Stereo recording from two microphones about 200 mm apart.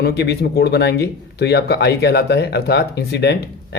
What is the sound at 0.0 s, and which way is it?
Speech, 55° left (ahead or behind).